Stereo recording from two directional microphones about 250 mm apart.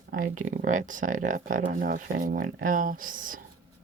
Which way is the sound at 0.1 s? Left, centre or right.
Right.